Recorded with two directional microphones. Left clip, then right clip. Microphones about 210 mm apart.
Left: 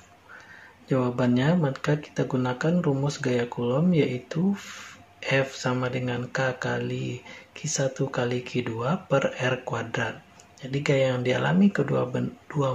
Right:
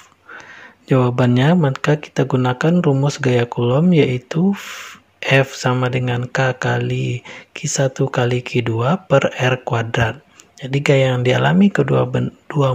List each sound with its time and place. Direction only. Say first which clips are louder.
0.8 s speech: right 8 dB; 45° right (ahead or behind)